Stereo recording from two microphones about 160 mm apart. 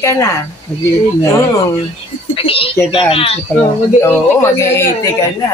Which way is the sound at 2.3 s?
35° left (ahead or behind).